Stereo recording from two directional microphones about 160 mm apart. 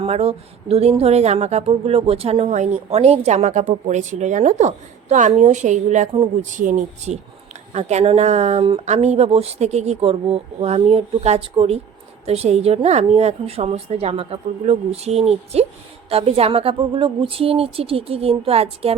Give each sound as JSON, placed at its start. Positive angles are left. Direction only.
{"t": 0.0, "sound": "a woman's voice", "side_deg": -40}